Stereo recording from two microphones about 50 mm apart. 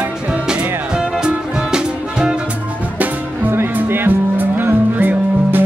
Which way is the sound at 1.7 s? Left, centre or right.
Centre.